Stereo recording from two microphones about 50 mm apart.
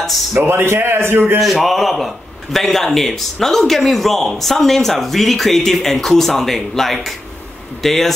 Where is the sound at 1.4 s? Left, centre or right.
Centre.